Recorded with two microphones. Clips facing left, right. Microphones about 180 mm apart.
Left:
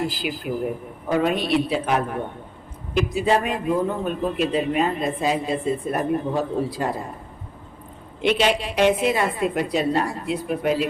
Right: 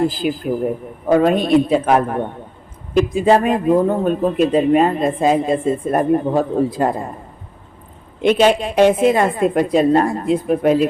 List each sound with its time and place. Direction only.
0.0 s a man's voice: 45° right (ahead or behind)
3.2 s a man's voice: 40° right (ahead or behind)
8.2 s a man's voice: 45° right (ahead or behind)